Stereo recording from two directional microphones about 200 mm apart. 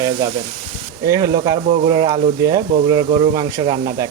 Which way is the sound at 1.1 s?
15° right (ahead or behind).